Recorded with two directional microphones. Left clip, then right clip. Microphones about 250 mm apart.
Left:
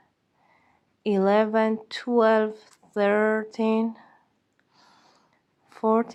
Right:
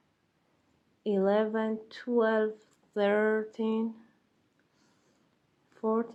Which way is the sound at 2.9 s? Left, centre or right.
Centre.